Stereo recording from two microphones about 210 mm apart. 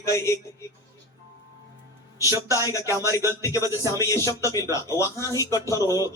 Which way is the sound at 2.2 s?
15° right (ahead or behind).